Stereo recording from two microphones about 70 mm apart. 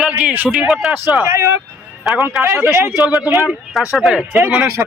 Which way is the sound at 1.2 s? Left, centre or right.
Right.